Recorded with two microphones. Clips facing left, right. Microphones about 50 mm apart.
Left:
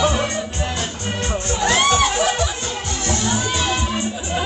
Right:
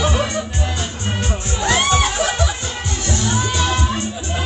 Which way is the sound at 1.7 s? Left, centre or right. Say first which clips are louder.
Left 1 dB; centre.